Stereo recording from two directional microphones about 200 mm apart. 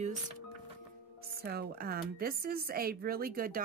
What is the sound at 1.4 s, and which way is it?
A woman's voice, 50° right (ahead or behind).